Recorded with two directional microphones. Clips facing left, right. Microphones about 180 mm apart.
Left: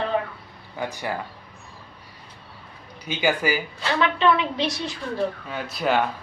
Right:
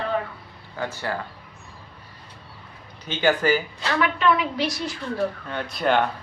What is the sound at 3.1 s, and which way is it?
Speech, 10° left (ahead or behind).